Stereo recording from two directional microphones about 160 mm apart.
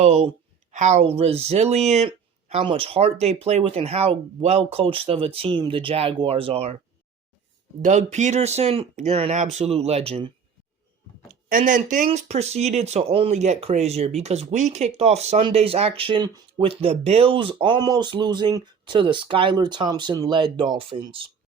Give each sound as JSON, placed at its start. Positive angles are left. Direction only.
{"t": 0.0, "sound": "speech", "side_deg": -45}
{"t": 7.8, "sound": "speech", "side_deg": -50}
{"t": 11.3, "sound": "speech", "side_deg": -60}
{"t": 12.0, "sound": "speech", "side_deg": -45}